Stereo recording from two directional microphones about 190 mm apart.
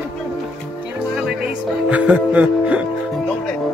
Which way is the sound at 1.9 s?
10° right (ahead or behind).